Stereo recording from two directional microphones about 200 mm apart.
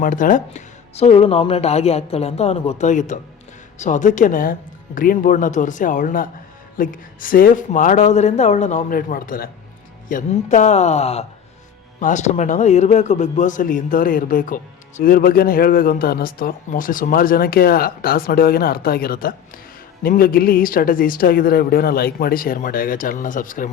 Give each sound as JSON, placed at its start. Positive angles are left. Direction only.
{"t": 0.0, "sound": "speech", "side_deg": 40}